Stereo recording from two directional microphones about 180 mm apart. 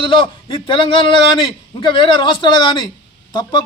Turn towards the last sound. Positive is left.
turn(degrees=25)  # may be behind; listen again after turning